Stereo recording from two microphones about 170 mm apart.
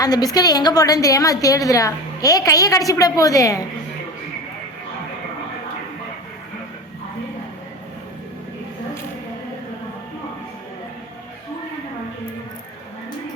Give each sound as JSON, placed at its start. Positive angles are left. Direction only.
{"t": 0.0, "sound": "a woman's voice", "side_deg": 20}